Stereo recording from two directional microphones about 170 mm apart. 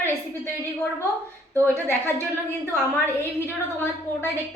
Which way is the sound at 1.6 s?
10° left (ahead or behind).